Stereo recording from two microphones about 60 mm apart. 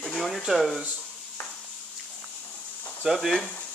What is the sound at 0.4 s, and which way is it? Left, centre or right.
Speech, centre.